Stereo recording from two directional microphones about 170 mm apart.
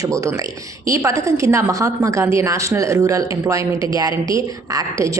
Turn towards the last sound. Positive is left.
turn(degrees=-20)  # may be behind; listen again after turning